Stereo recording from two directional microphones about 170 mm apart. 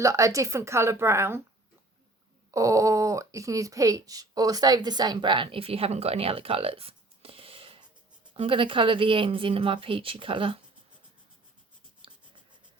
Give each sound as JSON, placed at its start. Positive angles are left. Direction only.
{"t": 0.0, "sound": "a woman's voice", "side_deg": -20}
{"t": 2.5, "sound": "speech", "side_deg": -20}
{"t": 12.0, "sound": "writing", "side_deg": -30}